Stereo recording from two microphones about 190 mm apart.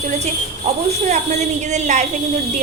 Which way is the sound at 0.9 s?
35° right (ahead or behind).